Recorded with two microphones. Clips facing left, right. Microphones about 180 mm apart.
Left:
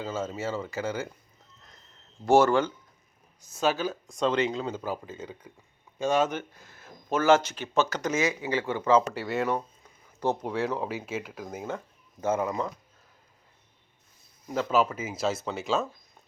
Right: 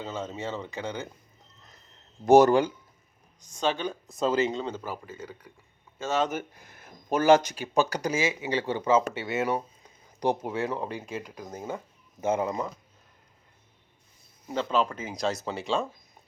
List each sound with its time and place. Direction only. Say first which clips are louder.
0.0 s speech: left 2 dB; 5° left (ahead or behind)
2.2 s speech: right 3 dB; 15° right (ahead or behind)
3.4 s speech: left 1 dB; 5° left (ahead or behind)
6.3 s speech: right 1 dB; 15° right (ahead or behind)
8.1 s speech: left 2 dB; 25° right (ahead or behind)
8.7 s speech: left 1 dB; 10° right (ahead or behind)
12.2 s speech: even; 20° right (ahead or behind)
14.5 s speech: left 2 dB; 5° left (ahead or behind)